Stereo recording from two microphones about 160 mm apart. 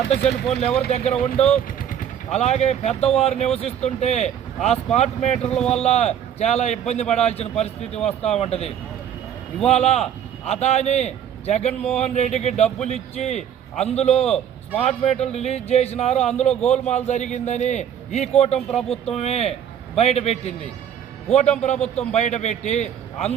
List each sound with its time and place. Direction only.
0.5 s a man's voice: 40° left (ahead or behind)
1.8 s a man's voice: 55° left (ahead or behind)
5.5 s speech: 5° left (ahead or behind)
5.7 s a man's voice: 40° left (ahead or behind)